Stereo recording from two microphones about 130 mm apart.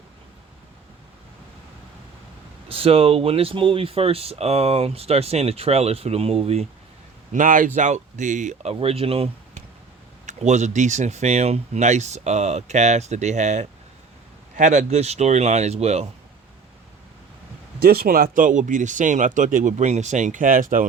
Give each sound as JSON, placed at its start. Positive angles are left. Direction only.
{"t": 2.6, "sound": "speech", "side_deg": -45}
{"t": 7.3, "sound": "speech", "side_deg": -90}
{"t": 7.8, "sound": "speech", "side_deg": -65}
{"t": 8.7, "sound": "speech", "side_deg": -50}
{"t": 10.2, "sound": "speech", "side_deg": -65}
{"t": 18.3, "sound": "speech", "side_deg": -85}